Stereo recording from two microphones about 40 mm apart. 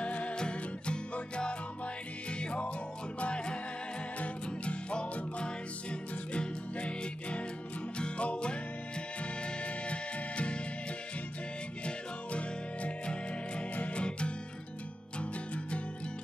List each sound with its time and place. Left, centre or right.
0.0 s music: left
11.8 s music: left